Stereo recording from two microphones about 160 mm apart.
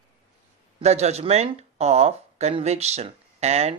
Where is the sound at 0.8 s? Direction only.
45° right (ahead or behind).